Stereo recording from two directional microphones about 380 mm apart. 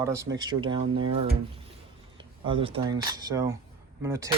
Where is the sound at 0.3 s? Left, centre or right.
Centre.